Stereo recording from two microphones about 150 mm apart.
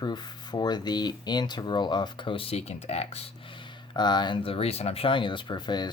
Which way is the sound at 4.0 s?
30° left (ahead or behind).